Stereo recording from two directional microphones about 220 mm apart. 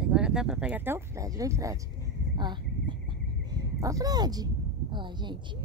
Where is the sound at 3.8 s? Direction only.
15° right (ahead or behind).